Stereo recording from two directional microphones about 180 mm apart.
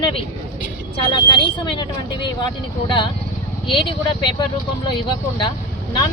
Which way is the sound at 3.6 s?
25° left (ahead or behind).